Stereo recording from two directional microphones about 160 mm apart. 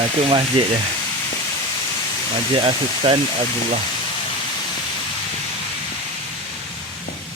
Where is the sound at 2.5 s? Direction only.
30° right (ahead or behind).